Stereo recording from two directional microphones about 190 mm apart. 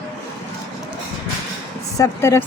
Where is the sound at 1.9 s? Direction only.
15° left (ahead or behind).